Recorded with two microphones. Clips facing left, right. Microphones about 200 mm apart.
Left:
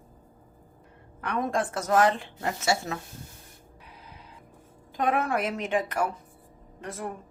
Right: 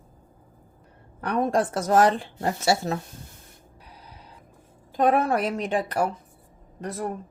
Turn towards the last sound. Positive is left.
turn(degrees=-40)  # may be behind; listen again after turning